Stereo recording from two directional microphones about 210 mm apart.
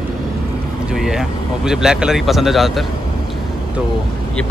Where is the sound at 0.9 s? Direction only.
Centre (ahead or behind).